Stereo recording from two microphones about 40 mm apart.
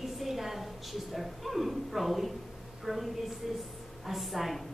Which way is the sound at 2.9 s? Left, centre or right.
Centre.